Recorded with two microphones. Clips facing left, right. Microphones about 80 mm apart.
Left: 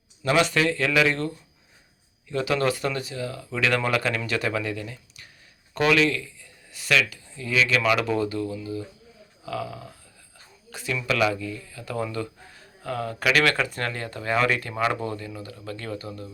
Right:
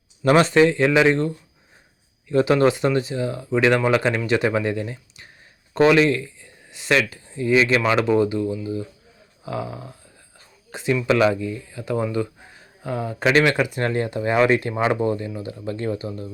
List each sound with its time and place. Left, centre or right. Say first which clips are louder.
0.3 s speech: right 7 dB; right
2.3 s speech: right 7 dB; right